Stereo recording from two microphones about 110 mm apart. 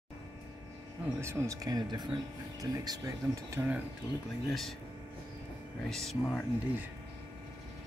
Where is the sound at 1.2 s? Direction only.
25° right (ahead or behind).